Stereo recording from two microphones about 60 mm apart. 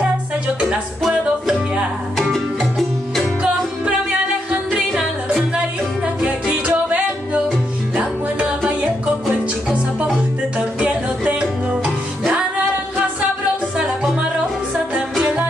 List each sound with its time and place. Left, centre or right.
2.1 s music: centre
4.7 s music: centre
6.2 s music: right
10.8 s music: centre